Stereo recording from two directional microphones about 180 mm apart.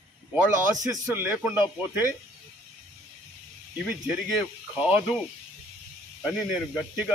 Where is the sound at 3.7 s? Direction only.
5° right (ahead or behind).